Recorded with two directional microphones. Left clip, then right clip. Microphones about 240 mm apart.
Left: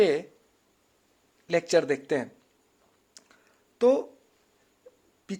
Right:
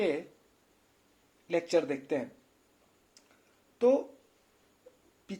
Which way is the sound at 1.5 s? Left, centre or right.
Left.